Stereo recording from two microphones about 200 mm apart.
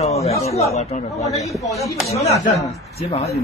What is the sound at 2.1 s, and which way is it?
Speech, 30° left (ahead or behind).